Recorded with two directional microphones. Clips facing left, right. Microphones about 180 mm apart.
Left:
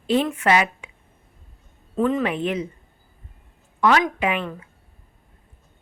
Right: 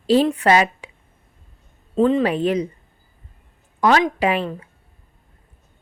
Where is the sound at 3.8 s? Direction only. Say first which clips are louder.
Right 2 dB; 30° right (ahead or behind).